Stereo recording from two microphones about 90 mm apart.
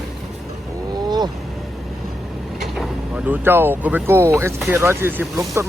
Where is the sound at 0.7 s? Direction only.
45° right (ahead or behind).